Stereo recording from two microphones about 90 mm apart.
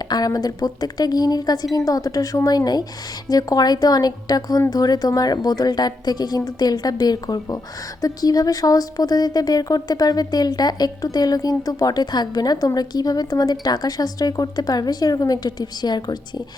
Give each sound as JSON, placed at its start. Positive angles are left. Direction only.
{"t": 0.1, "sound": "speech", "side_deg": 45}